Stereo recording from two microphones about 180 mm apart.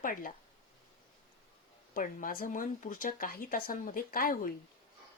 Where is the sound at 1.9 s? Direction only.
50° left (ahead or behind).